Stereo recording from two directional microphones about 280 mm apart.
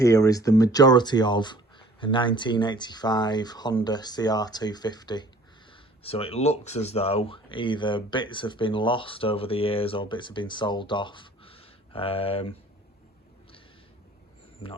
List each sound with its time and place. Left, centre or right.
0.0 s speech: centre